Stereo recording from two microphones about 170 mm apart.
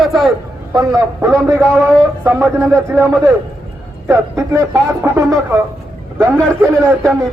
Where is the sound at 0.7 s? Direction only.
20° right (ahead or behind).